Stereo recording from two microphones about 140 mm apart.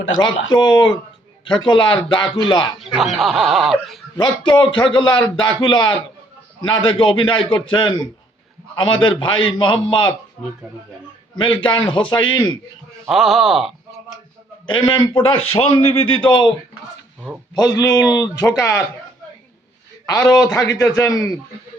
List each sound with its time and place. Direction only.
0.2 s a man's voice: 30° left (ahead or behind)
2.8 s speech: centre (ahead or behind)
4.2 s a man's voice: 35° left (ahead or behind)
11.3 s a man's voice: 35° left (ahead or behind)
13.1 s speech: centre (ahead or behind)
14.7 s a man's voice: 35° left (ahead or behind)
17.5 s speech: 25° left (ahead or behind)
20.1 s speech: 25° left (ahead or behind)